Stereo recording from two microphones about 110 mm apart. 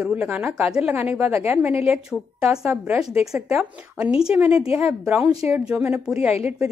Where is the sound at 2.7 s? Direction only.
15° right (ahead or behind).